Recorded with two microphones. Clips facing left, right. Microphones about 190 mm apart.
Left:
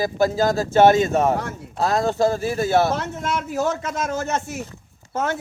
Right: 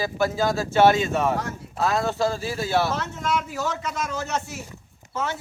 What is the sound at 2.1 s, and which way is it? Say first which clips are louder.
Speech: left 4 dB; 20° left (ahead or behind).